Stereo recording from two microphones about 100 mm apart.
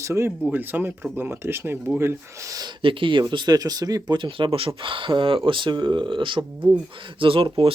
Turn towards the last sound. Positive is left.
turn(degrees=-65)  # may be behind; listen again after turning